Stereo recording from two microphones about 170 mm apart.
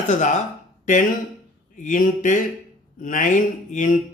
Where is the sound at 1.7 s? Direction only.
50° left (ahead or behind).